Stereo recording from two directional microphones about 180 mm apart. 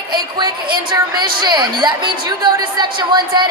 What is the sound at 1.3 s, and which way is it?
Speech, 25° right (ahead or behind).